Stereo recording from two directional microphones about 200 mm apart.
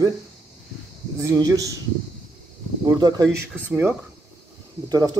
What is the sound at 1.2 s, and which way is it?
Speech, 15° right (ahead or behind).